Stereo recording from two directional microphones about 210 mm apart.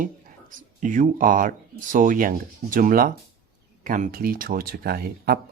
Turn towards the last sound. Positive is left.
turn(degrees=-45)  # may be behind; listen again after turning